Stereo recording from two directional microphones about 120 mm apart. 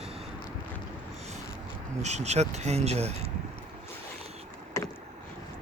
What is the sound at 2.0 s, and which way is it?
Speech, 70° right (ahead or behind).